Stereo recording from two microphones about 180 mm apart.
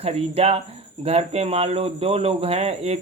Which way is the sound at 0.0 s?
35° right (ahead or behind).